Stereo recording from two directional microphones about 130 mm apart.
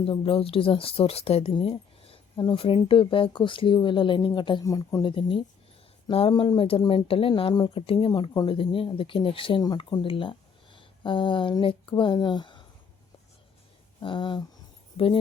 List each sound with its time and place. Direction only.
0.0 s speech: 45° left (ahead or behind)
4.6 s speech: 25° left (ahead or behind)
5.0 s speech: 45° left (ahead or behind)
8.4 s speech: 45° left (ahead or behind)
14.0 s speech: 40° left (ahead or behind)